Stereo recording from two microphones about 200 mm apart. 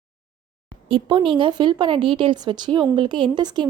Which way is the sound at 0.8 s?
25° right (ahead or behind).